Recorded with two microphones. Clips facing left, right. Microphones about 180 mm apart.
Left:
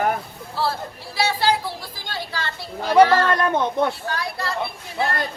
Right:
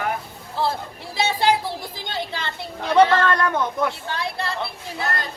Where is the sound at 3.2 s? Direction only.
20° left (ahead or behind).